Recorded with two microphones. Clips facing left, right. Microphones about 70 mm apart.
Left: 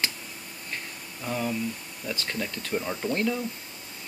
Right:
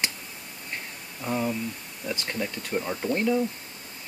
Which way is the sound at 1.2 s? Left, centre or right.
Centre.